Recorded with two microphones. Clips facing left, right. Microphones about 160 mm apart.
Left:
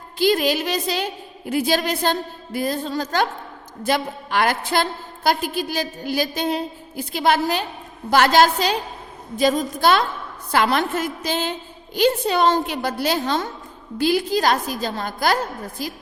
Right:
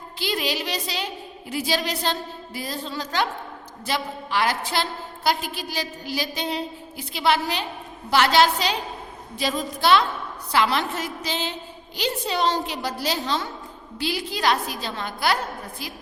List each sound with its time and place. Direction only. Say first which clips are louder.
0.2 s a woman's voice: left 8 dB; 50° left (ahead or behind)